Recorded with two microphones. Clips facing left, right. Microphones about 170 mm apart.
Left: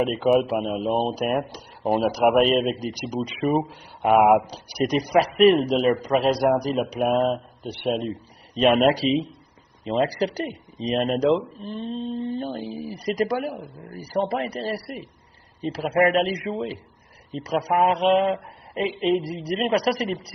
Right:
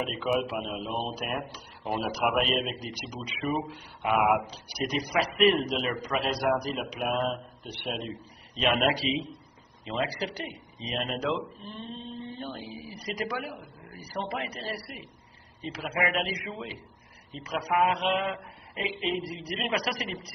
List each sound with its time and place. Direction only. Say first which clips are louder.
0.2 s speech: left 8 dB; 40° left (ahead or behind)